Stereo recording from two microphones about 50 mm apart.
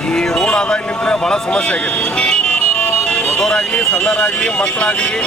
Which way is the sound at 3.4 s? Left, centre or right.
Centre.